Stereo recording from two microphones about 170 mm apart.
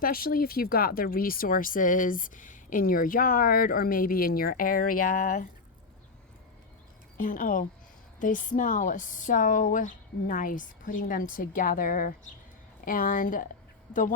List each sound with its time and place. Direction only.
0.0 s speech: 60° left (ahead or behind)
7.2 s speech: 55° left (ahead or behind)